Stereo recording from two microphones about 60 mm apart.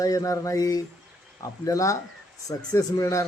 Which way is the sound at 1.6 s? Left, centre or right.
Left.